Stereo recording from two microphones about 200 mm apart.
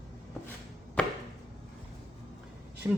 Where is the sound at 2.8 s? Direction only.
20° right (ahead or behind).